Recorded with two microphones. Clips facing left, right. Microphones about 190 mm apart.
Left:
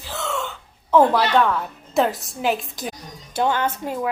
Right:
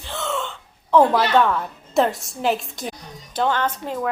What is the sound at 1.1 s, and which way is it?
A woman's voice, centre (ahead or behind).